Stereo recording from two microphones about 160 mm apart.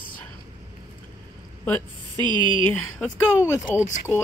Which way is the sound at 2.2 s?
30° right (ahead or behind).